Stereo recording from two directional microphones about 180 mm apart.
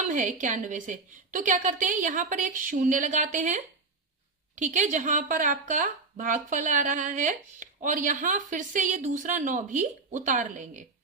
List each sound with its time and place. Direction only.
0.1 s a woman's voice: 45° right (ahead or behind)